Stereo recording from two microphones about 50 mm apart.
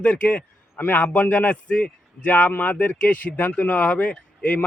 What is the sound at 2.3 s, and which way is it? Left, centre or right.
A man's voice, left.